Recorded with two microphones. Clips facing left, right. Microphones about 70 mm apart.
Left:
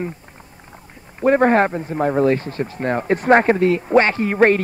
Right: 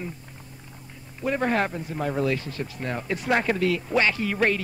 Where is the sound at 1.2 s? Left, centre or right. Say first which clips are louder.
Left 10 dB; left.